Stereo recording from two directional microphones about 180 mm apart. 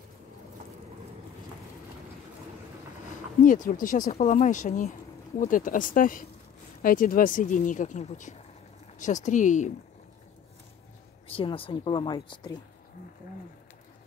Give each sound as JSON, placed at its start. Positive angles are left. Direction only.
{"t": 3.4, "sound": "speech", "side_deg": 50}
{"t": 11.2, "sound": "speech", "side_deg": 30}